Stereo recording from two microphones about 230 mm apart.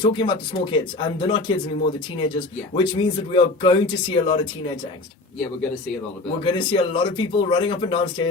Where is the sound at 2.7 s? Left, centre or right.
Left.